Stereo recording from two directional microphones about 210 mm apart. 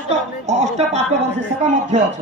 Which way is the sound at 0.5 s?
30° right (ahead or behind).